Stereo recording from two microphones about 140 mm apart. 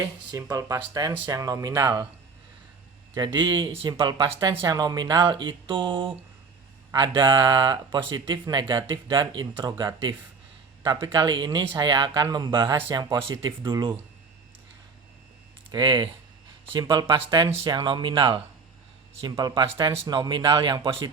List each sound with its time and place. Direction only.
0.0 s speech: 25° right (ahead or behind)
3.2 s speech: 35° right (ahead or behind)
15.7 s speech: 30° right (ahead or behind)